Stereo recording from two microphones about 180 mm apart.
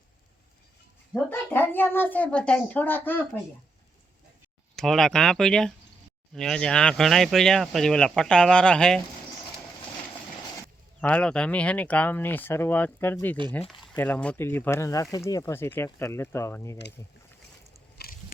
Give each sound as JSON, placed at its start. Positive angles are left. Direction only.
{"t": 1.1, "sound": "speech", "side_deg": 10}
{"t": 4.8, "sound": "speech", "side_deg": 0}
{"t": 11.0, "sound": "speech", "side_deg": 5}
{"t": 17.9, "sound": "biting", "side_deg": 60}